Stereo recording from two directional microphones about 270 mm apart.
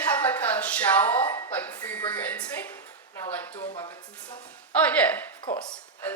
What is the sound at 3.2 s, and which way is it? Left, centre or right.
Speech, centre.